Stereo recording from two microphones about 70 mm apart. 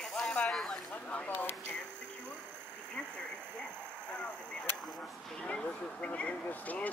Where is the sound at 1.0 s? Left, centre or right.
Left.